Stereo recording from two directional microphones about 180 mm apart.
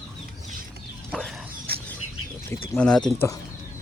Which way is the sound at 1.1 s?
Centre (ahead or behind).